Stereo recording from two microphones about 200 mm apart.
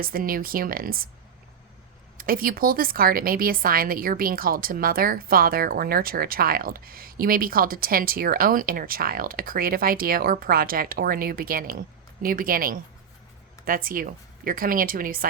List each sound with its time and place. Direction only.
0.0 s a woman's voice: 45° right (ahead or behind)
2.1 s a woman's voice: 45° right (ahead or behind)